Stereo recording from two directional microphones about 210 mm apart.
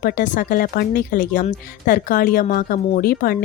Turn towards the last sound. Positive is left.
turn(degrees=45)  # may be behind; listen again after turning